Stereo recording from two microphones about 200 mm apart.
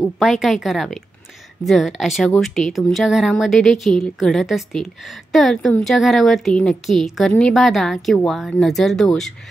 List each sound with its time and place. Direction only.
0.2 s a woman's voice: centre (ahead or behind)